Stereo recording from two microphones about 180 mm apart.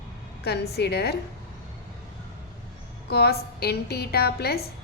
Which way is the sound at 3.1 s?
60° left (ahead or behind).